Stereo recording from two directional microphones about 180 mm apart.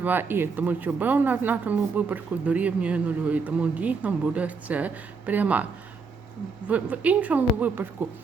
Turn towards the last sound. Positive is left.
turn(degrees=-10)  # may be behind; listen again after turning